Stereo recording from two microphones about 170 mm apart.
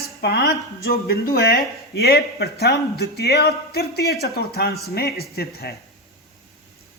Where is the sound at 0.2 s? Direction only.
75° left (ahead or behind).